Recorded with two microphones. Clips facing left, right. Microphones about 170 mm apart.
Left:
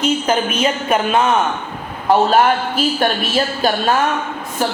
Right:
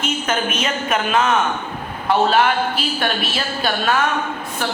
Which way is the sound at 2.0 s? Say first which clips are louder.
Left 3 dB; 40° left (ahead or behind).